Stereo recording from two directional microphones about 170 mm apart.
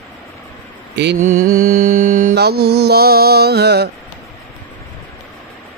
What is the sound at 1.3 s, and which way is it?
Mantra, 55° right (ahead or behind).